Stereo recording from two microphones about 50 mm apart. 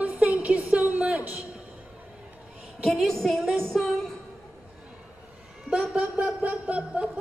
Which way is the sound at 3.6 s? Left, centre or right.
Centre.